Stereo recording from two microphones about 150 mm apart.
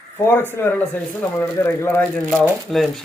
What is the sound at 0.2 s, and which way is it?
Speech, 15° left (ahead or behind).